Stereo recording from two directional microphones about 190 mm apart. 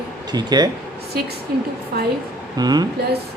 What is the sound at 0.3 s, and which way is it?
Speech, 20° right (ahead or behind).